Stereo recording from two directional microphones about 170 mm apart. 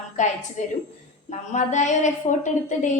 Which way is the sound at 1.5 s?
45° left (ahead or behind).